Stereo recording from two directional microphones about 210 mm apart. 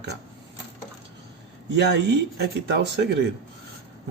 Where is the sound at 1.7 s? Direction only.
55° right (ahead or behind).